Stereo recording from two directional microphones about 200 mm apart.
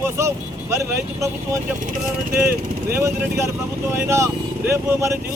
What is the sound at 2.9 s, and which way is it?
Speech, 15° right (ahead or behind).